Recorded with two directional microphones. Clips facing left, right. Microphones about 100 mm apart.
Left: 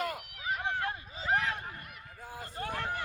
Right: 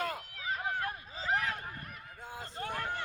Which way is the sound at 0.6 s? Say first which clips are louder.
Left 1 dB; 25° left (ahead or behind).